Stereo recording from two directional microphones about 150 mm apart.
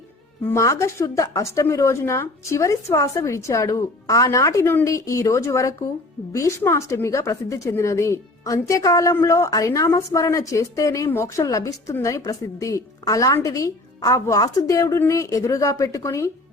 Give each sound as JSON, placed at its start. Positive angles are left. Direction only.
{"t": 0.4, "sound": "speech", "side_deg": 20}